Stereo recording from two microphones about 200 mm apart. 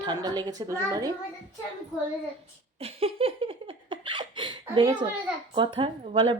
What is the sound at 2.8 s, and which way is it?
Laughter, 30° right (ahead or behind).